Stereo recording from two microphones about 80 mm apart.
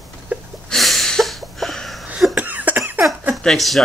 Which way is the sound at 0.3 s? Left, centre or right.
Centre.